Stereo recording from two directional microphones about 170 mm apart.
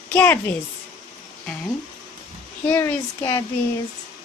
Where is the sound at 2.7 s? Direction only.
15° left (ahead or behind).